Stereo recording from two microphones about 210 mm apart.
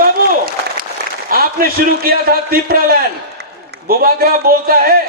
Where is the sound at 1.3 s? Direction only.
45° right (ahead or behind).